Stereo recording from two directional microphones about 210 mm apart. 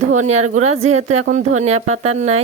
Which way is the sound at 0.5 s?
30° right (ahead or behind).